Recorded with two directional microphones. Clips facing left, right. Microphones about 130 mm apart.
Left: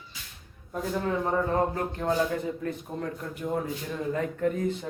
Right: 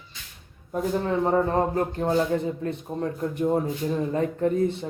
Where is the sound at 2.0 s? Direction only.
25° right (ahead or behind).